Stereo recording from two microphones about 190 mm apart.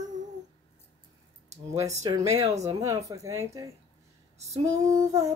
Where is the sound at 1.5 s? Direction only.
15° right (ahead or behind).